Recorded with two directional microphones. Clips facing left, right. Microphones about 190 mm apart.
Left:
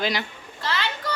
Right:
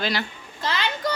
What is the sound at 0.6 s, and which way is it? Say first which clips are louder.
Speech: right 3 dB; 15° right (ahead or behind).